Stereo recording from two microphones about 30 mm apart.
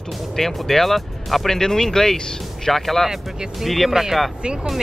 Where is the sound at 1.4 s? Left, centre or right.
Centre.